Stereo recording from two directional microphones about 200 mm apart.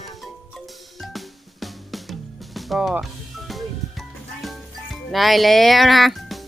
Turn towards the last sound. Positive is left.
turn(degrees=0)  # may be behind; listen again after turning